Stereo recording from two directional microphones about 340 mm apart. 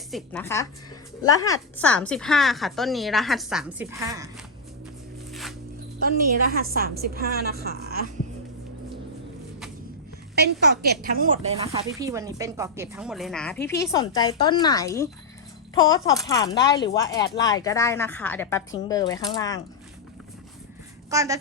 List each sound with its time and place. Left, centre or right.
0.1 s a woman's voice: centre
5.3 s music: centre
6.5 s a woman's voice: right
10.3 s a woman's voice: right; by 19.6 s centre
21.1 s a woman's voice: centre